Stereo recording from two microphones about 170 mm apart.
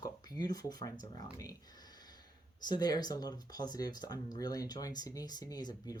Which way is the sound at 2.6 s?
25° left (ahead or behind).